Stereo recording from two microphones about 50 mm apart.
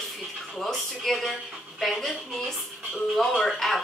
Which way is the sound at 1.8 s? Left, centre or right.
Centre.